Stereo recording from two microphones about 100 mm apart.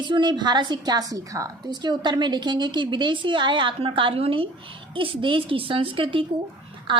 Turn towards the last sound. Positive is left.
turn(degrees=-50)  # may be behind; listen again after turning